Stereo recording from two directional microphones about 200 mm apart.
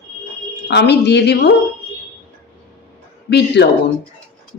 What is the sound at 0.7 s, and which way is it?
Speech, 55° left (ahead or behind).